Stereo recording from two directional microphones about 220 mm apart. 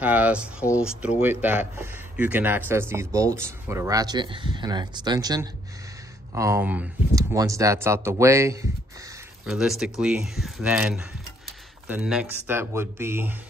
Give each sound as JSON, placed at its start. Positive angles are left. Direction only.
{"t": 0.0, "sound": "speech", "side_deg": -5}
{"t": 9.5, "sound": "speech", "side_deg": 0}